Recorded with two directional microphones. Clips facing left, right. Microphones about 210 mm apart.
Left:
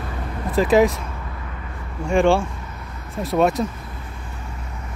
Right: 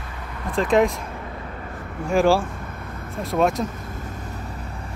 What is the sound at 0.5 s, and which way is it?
Speech, 5° left (ahead or behind).